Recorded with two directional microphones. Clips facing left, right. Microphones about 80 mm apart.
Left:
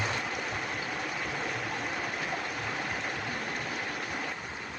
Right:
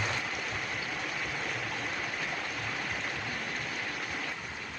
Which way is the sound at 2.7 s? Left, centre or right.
Left.